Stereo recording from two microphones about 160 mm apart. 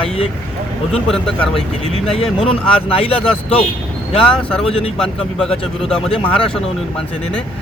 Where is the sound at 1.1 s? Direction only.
5° left (ahead or behind).